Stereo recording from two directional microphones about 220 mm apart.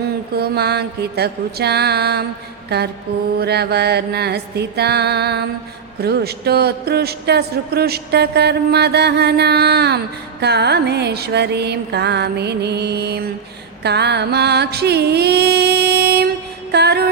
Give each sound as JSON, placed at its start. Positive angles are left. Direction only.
{"t": 0.3, "sound": "speech", "side_deg": -45}
{"t": 2.6, "sound": "mantra", "side_deg": -50}
{"t": 3.3, "sound": "speech", "side_deg": -45}